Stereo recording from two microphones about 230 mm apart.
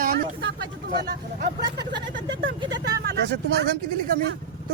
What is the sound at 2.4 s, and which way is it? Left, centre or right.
Speech, right.